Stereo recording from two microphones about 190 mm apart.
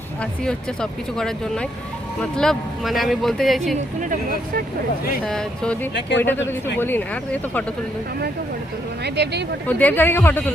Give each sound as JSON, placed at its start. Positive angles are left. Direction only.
{"t": 0.2, "sound": "speech", "side_deg": 5}
{"t": 4.1, "sound": "speech", "side_deg": -50}
{"t": 5.2, "sound": "speech", "side_deg": 5}
{"t": 9.0, "sound": "speech", "side_deg": -60}
{"t": 9.6, "sound": "speech", "side_deg": 10}